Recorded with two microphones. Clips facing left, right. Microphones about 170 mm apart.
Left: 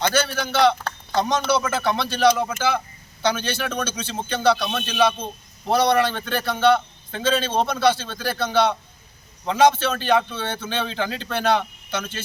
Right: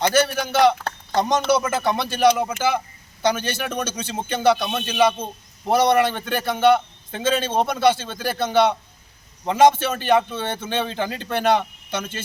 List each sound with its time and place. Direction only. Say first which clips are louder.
0.0 s speech: right 3 dB; 15° right (ahead or behind)
3.3 s speech: even; 45° right (ahead or behind)
4.0 s a man's voice: right 2 dB; 20° right (ahead or behind)
9.5 s speech: right 2 dB; 15° right (ahead or behind)